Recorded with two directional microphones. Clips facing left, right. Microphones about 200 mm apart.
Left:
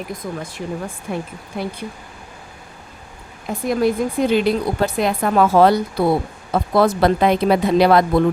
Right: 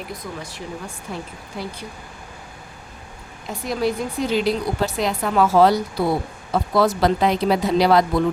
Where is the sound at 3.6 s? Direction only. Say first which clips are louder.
Left 5 dB; 50° left (ahead or behind).